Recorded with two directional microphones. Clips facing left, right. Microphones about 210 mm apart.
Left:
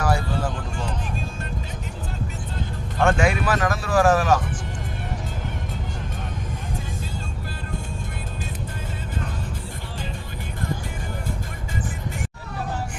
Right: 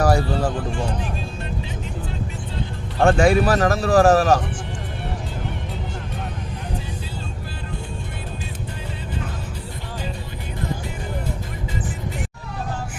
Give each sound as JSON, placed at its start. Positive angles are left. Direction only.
{"t": 0.0, "sound": "music", "side_deg": -40}
{"t": 3.0, "sound": "speech", "side_deg": -35}